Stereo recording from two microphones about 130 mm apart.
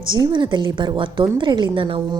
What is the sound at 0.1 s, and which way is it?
A woman's voice, 35° right (ahead or behind).